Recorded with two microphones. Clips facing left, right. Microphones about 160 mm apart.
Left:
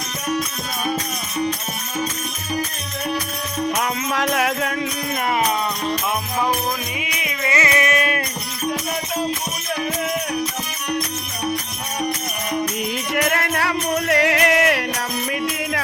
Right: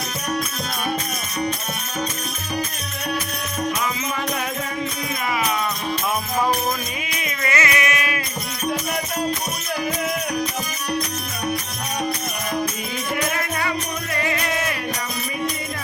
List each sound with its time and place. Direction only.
3.8 s music: 70° left (ahead or behind)
7.0 s music: 15° left (ahead or behind); by 8.2 s 45° left (ahead or behind)
13.1 s music: 65° left (ahead or behind)